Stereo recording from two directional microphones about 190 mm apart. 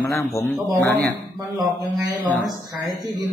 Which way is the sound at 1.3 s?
20° right (ahead or behind).